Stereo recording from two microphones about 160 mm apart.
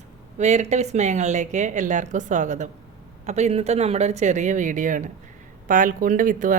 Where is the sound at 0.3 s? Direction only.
45° right (ahead or behind).